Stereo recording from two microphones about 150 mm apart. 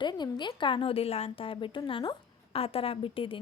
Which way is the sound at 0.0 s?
30° left (ahead or behind).